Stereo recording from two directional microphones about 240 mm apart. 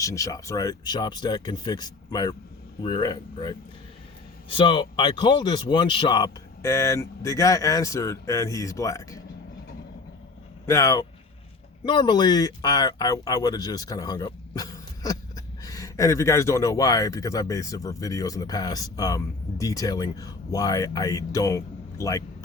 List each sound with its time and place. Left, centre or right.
0.0 s speech: centre
10.7 s speech: centre